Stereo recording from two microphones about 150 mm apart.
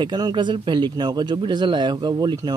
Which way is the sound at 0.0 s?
30° right (ahead or behind).